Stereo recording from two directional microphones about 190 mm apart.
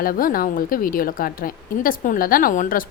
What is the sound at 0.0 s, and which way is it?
A woman's voice, 50° left (ahead or behind).